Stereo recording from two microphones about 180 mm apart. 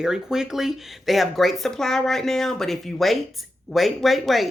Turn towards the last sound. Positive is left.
turn(degrees=0)  # may be behind; listen again after turning